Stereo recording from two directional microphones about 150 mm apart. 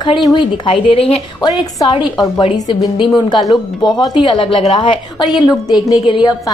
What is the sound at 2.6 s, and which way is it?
A woman's voice, 30° left (ahead or behind).